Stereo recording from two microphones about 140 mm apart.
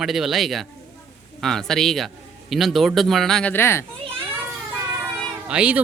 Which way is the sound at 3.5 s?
15° left (ahead or behind).